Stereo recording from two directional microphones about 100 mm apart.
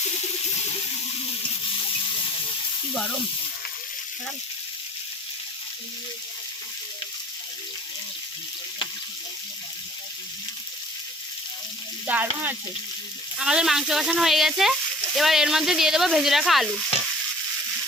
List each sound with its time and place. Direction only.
12.0 s frying: 15° right (ahead or behind)
13.4 s speech: 5° right (ahead or behind)